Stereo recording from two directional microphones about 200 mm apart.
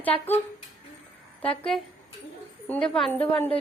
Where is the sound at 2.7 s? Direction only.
5° left (ahead or behind).